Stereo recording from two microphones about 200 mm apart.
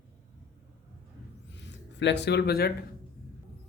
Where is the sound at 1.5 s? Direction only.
60° left (ahead or behind).